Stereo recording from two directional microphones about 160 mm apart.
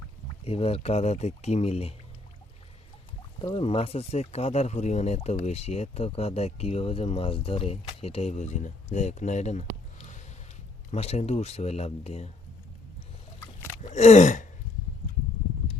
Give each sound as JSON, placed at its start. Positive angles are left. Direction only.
{"t": 0.4, "sound": "speech", "side_deg": 40}
{"t": 3.4, "sound": "speech", "side_deg": 35}
{"t": 13.8, "sound": "speech", "side_deg": 45}